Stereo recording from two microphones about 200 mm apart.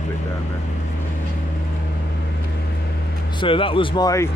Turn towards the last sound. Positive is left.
turn(degrees=15)  # may be behind; listen again after turning